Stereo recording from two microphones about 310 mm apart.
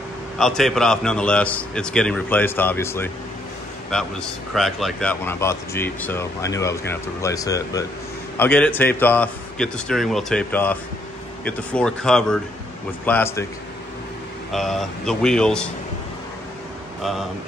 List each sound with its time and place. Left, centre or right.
0.4 s a man's voice: centre
4.6 s a man's voice: centre
14.5 s a man's voice: centre